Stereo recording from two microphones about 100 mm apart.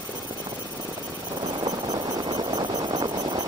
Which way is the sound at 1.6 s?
45° right (ahead or behind).